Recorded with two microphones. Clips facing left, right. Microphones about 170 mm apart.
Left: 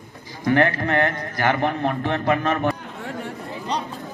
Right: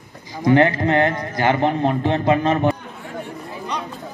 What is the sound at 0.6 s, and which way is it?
A man's voice, 20° right (ahead or behind).